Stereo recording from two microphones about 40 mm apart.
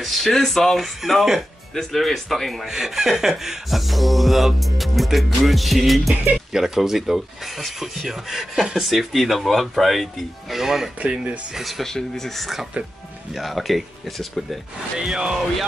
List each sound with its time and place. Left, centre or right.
0.0 s music: centre
2.6 s music: centre
6.3 s speech: centre
9.1 s music: centre
11.0 s speech: right
11.8 s speech: centre
13.3 s music: centre
15.0 s speech: centre